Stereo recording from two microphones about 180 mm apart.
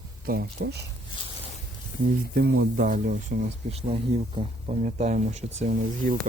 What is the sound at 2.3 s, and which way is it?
Speech, 60° right (ahead or behind).